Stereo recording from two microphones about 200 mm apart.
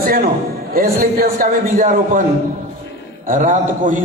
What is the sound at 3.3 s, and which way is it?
Speech, 40° right (ahead or behind).